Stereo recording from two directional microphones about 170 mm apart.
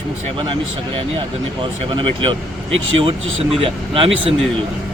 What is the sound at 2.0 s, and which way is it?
Speech, 30° right (ahead or behind).